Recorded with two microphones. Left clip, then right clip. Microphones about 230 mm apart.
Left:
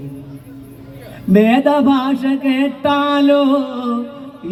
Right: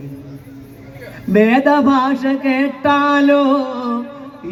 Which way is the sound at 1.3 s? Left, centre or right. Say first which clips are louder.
Even; left.